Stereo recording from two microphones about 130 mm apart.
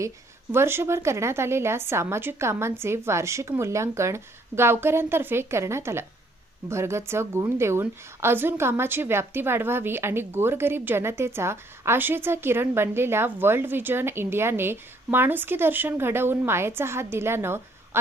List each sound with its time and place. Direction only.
0.5 s a woman's voice: 20° right (ahead or behind)